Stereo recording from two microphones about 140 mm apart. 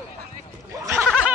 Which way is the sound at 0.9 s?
15° right (ahead or behind).